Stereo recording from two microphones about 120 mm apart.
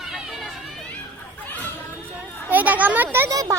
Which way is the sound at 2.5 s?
15° right (ahead or behind).